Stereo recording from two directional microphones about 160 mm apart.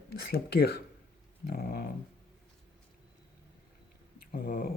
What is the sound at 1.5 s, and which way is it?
Speech, 65° left (ahead or behind).